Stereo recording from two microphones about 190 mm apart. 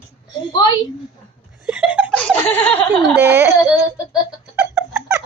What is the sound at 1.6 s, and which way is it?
Laughter, 5° right (ahead or behind).